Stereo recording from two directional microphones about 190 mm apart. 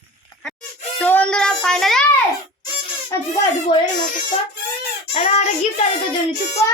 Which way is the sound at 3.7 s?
25° left (ahead or behind).